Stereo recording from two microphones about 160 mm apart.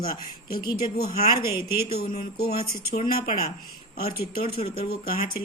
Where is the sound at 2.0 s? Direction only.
65° left (ahead or behind).